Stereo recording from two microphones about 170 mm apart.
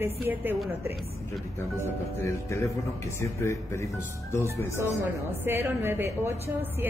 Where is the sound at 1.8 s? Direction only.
15° left (ahead or behind).